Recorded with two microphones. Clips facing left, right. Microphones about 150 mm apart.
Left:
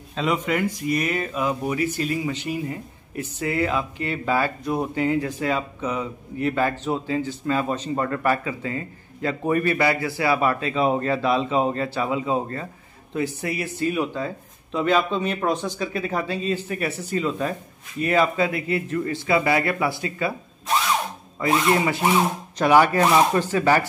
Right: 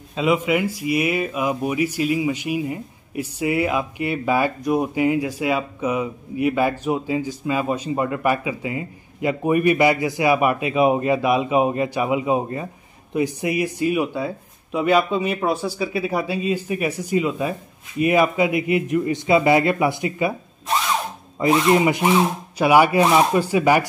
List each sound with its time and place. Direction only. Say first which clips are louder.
0.1 s speech: right 4 dB; 10° right (ahead or behind)
21.4 s speech: right 4 dB; 20° right (ahead or behind)